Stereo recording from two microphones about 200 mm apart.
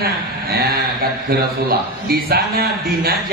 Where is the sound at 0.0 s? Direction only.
50° right (ahead or behind).